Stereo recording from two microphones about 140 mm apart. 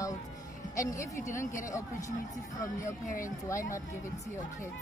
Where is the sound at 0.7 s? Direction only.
20° left (ahead or behind).